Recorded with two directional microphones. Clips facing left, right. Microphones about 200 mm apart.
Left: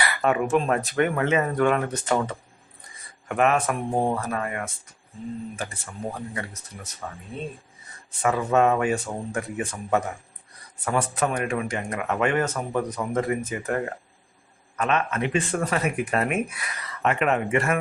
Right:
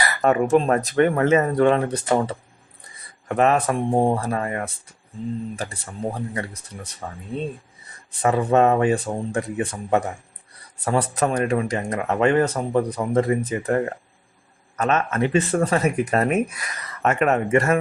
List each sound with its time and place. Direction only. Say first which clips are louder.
0.0 s speech: right 4 dB; 40° right (ahead or behind)
8.2 s speech: right 3 dB; 35° right (ahead or behind)
14.8 s speech: right 3 dB; 40° right (ahead or behind)